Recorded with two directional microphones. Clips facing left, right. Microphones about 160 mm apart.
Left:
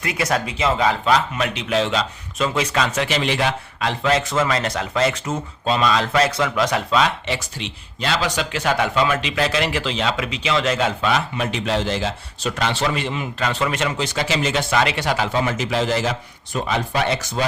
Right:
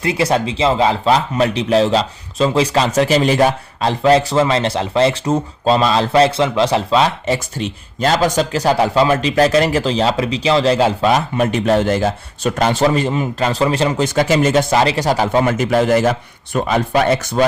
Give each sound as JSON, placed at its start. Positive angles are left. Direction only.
{"t": 0.0, "sound": "speech", "side_deg": -30}
{"t": 7.3, "sound": "speech", "side_deg": -45}
{"t": 14.0, "sound": "a man's voice", "side_deg": -50}